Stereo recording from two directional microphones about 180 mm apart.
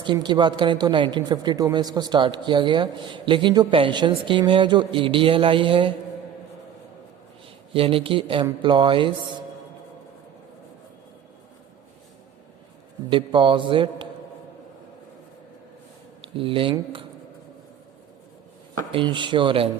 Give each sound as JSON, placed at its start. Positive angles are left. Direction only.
{"t": 0.0, "sound": "speech", "side_deg": -25}
{"t": 7.7, "sound": "speech", "side_deg": -30}
{"t": 13.1, "sound": "speech", "side_deg": -25}
{"t": 16.2, "sound": "speech", "side_deg": -30}
{"t": 18.9, "sound": "speech", "side_deg": -25}